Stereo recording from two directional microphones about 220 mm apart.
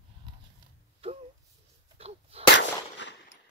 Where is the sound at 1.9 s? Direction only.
25° right (ahead or behind).